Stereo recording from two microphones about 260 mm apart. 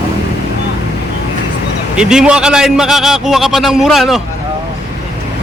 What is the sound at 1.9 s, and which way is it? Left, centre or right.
A man's voice, centre.